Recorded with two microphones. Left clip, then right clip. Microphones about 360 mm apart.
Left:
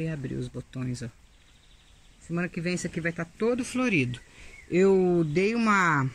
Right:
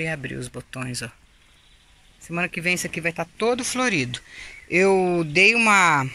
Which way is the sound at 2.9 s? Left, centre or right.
Right.